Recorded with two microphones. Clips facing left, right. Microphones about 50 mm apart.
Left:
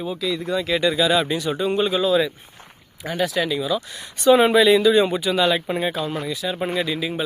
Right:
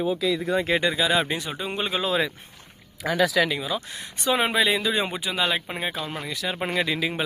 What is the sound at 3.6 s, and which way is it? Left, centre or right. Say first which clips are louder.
Speech: left 5 dB; right.